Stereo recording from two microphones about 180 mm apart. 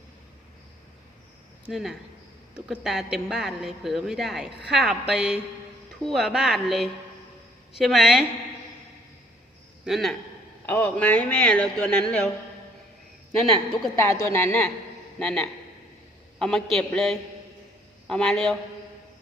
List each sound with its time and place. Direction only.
1.6 s a woman's voice: centre (ahead or behind)
9.8 s a woman's voice: centre (ahead or behind)
13.4 s a woman's voice: centre (ahead or behind)
13.9 s a man's voice: 15° left (ahead or behind)